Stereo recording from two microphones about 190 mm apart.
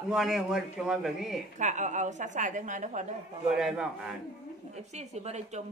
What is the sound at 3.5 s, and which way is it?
Speech, 5° right (ahead or behind).